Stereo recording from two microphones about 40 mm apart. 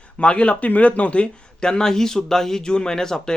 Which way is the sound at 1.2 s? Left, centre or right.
Left.